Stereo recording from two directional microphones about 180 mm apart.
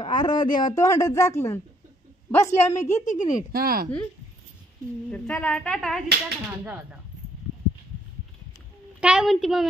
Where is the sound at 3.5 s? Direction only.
55° right (ahead or behind).